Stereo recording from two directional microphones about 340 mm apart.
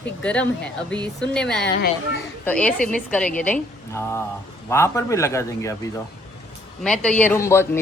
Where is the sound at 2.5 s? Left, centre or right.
Centre.